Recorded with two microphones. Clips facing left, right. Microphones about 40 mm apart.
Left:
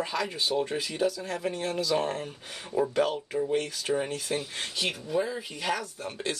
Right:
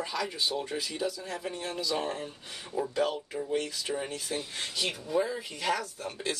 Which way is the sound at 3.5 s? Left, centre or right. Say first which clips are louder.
Left 2 dB; left.